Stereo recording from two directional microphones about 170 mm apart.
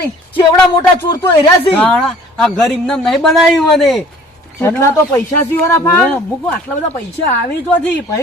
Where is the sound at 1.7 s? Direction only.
5° left (ahead or behind).